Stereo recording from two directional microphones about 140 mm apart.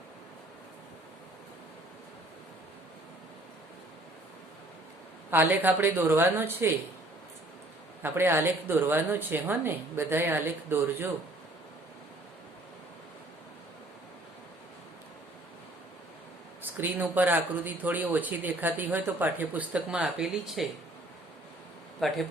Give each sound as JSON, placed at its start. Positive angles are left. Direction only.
{"t": 5.3, "sound": "speech", "side_deg": -15}
{"t": 8.0, "sound": "speech", "side_deg": -15}
{"t": 16.7, "sound": "speech", "side_deg": -15}
{"t": 22.0, "sound": "speech", "side_deg": 0}